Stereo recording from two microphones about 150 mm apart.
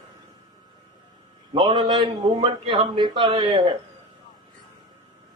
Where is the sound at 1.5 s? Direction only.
35° right (ahead or behind).